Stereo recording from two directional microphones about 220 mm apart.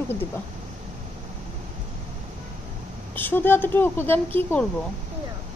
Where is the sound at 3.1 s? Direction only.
10° left (ahead or behind).